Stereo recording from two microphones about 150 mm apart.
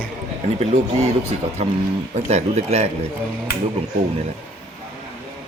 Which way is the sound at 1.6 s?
45° right (ahead or behind).